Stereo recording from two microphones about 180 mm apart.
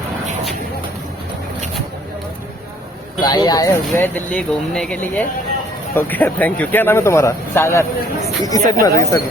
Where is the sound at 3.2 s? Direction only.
25° left (ahead or behind).